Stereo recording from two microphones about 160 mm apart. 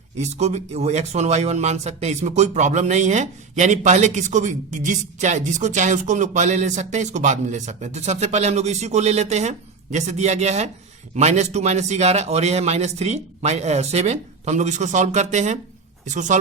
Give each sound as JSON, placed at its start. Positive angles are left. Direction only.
{"t": 0.2, "sound": "speech", "side_deg": -45}